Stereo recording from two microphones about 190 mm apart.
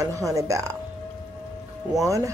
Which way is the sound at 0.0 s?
15° right (ahead or behind).